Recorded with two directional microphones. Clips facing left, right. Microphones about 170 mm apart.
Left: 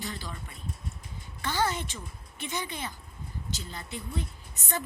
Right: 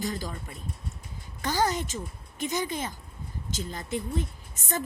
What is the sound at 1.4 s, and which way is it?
A woman's voice, 40° right (ahead or behind).